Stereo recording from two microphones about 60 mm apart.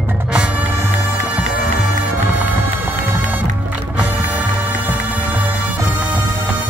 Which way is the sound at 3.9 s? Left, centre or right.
Right.